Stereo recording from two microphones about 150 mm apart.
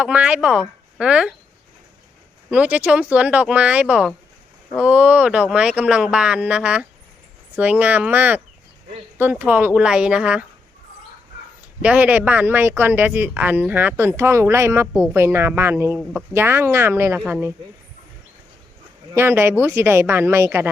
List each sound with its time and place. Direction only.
0.0 s speech: 10° right (ahead or behind)
2.5 s speech: 10° right (ahead or behind)
11.8 s speech: 10° right (ahead or behind)
19.1 s speech: 15° right (ahead or behind)